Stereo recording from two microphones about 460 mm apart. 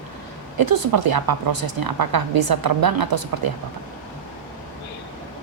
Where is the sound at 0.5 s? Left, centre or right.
Right.